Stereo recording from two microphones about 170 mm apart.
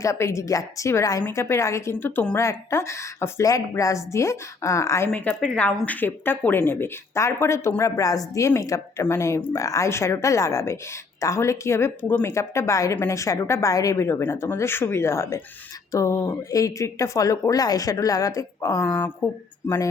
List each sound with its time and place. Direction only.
0.0 s a woman's voice: 15° left (ahead or behind)